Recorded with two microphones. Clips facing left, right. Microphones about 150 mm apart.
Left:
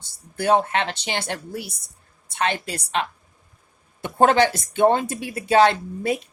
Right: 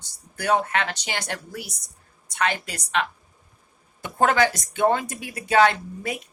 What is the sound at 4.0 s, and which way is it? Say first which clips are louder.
Speech: left 3 dB; 30° left (ahead or behind).